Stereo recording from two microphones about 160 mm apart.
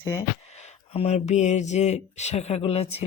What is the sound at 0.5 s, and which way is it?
Speech, 45° left (ahead or behind).